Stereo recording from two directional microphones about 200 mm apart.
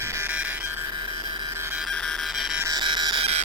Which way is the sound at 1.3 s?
20° right (ahead or behind).